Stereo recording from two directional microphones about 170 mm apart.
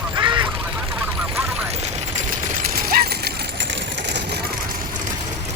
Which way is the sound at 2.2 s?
50° right (ahead or behind).